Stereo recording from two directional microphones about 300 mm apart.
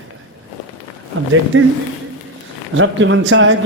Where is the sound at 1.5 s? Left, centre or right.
Right.